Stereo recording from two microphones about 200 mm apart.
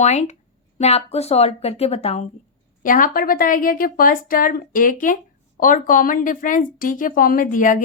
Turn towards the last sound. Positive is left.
turn(degrees=40)  # may be behind; listen again after turning